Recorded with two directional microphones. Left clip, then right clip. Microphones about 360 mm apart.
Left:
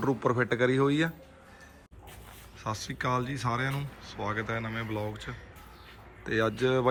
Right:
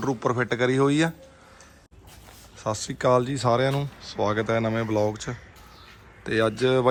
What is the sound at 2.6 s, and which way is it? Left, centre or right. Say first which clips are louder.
Speech: right 8 dB; centre.